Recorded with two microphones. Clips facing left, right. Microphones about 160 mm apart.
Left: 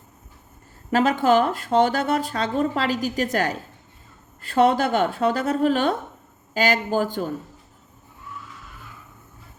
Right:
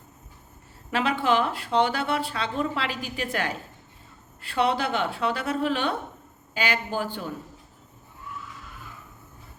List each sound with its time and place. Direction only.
0.9 s a woman's voice: 45° left (ahead or behind)